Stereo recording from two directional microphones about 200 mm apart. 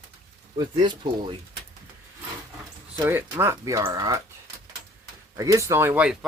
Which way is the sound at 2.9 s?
10° right (ahead or behind).